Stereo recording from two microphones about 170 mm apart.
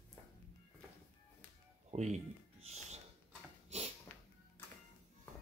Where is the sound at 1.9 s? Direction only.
40° right (ahead or behind).